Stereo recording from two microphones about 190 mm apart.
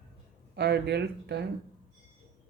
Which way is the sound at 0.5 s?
60° right (ahead or behind).